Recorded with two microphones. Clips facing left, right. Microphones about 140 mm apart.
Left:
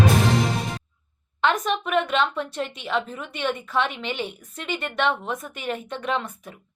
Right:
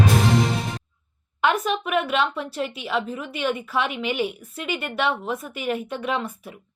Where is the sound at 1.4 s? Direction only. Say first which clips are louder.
Right 1 dB; 5° right (ahead or behind).